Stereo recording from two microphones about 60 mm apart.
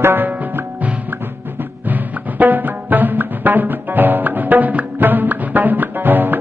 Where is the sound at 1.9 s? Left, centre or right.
Right.